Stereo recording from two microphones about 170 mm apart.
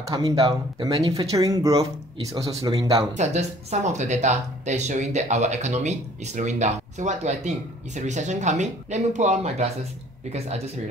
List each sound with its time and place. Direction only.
0.1 s speech: 25° right (ahead or behind)
3.2 s speech: 40° right (ahead or behind)